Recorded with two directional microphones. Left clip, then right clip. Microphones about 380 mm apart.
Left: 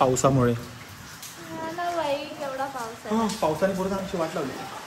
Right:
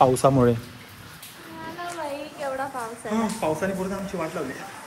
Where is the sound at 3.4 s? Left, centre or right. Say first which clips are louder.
Left 1 dB; centre.